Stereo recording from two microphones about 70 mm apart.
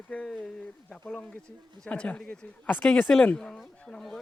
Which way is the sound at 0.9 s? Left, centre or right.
Centre.